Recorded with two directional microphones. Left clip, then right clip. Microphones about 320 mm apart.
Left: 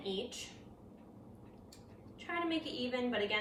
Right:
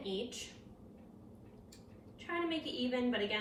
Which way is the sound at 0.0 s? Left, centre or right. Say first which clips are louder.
Even; centre.